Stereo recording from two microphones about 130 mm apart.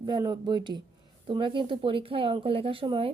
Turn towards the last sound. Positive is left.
turn(degrees=-40)  # may be behind; listen again after turning